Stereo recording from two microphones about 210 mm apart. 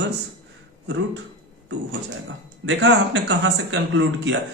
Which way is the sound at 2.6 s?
60° right (ahead or behind).